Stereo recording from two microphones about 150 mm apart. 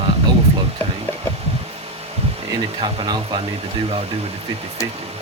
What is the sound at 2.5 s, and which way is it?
Speech, 30° right (ahead or behind).